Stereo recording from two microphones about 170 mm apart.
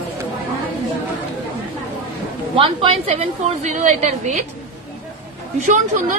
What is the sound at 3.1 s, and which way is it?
A woman's voice, 40° right (ahead or behind).